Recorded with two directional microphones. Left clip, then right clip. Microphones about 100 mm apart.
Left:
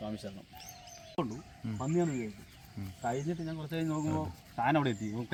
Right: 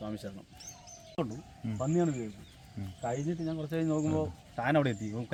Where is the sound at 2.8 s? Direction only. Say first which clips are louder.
Right 1 dB; 35° right (ahead or behind).